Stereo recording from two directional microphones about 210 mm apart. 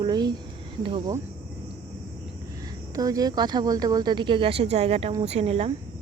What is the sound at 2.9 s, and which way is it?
Speech, 15° right (ahead or behind).